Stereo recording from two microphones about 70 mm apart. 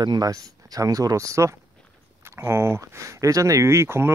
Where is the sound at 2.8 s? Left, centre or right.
Right.